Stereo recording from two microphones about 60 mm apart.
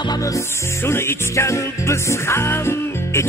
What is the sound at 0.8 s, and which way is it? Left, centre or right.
Music, left.